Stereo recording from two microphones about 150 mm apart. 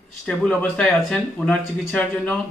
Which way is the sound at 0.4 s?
5° left (ahead or behind).